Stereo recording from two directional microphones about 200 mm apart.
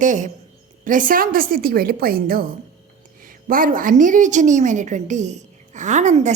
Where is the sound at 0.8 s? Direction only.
40° right (ahead or behind).